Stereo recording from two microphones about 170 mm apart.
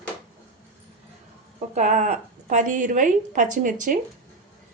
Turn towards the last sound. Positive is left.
turn(degrees=-50)  # may be behind; listen again after turning